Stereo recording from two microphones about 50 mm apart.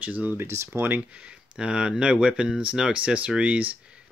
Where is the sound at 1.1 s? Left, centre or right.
Right.